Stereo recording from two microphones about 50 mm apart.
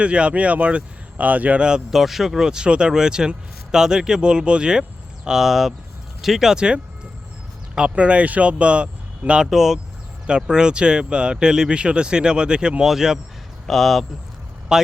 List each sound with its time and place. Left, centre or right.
0.0 s speech: right
1.9 s speech: centre
6.6 s speech: centre
9.5 s speech: centre
12.8 s speech: centre
14.7 s speech: centre